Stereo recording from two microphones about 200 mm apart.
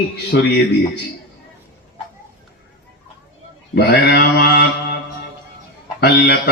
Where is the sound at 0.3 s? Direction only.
60° left (ahead or behind).